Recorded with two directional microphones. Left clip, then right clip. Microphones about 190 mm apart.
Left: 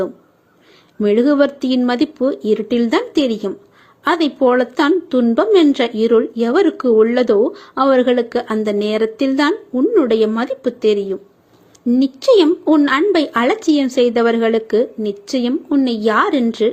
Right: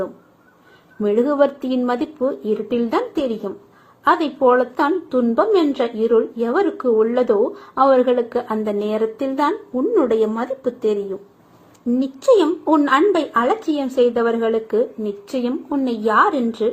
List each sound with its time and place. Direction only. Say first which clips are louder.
1.0 s a woman's voice: left 3 dB; 40° left (ahead or behind)
12.2 s a woman's voice: left 2 dB; 40° left (ahead or behind)